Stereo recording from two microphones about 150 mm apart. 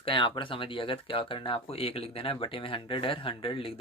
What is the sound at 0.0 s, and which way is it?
Speech, 35° left (ahead or behind).